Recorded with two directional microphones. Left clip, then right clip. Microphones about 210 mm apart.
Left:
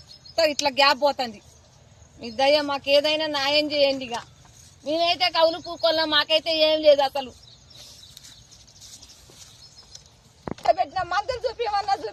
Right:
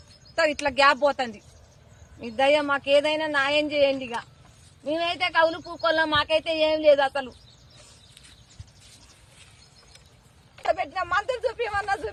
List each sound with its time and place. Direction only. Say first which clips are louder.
0.3 s speech: left 2 dB; 10° right (ahead or behind)
10.6 s a sound: left 4 dB; centre (ahead or behind)
11.0 s speech: even; centre (ahead or behind)
11.3 s speech: left 1 dB; 30° right (ahead or behind)